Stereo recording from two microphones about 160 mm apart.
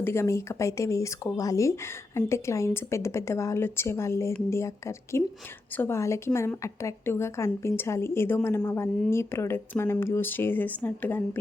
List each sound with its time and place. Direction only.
0.0 s a woman's voice: 15° left (ahead or behind)